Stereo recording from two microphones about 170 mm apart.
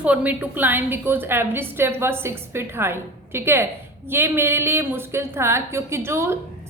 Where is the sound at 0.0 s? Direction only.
10° right (ahead or behind).